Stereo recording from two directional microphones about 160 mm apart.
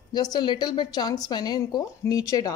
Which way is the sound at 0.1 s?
25° left (ahead or behind).